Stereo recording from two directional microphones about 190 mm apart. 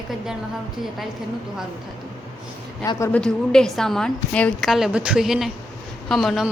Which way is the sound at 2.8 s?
15° left (ahead or behind).